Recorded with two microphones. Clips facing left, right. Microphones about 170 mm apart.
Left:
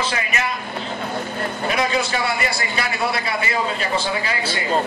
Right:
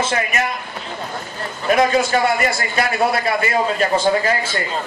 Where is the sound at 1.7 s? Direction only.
45° right (ahead or behind).